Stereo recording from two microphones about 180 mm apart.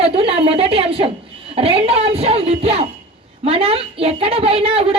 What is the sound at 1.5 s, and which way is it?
Music, 30° right (ahead or behind).